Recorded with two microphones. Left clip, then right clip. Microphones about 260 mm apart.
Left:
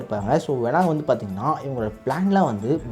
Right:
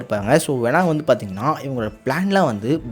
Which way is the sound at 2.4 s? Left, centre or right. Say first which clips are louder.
Right 3 dB; right.